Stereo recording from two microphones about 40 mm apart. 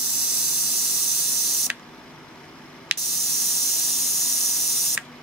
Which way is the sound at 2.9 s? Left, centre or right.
Right.